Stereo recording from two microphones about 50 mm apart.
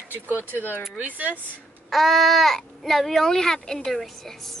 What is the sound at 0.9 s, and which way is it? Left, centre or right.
Speech, right.